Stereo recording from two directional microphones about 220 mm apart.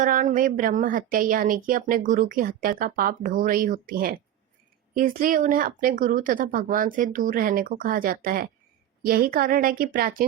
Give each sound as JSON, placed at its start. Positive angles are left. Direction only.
{"t": 0.0, "sound": "speech", "side_deg": -35}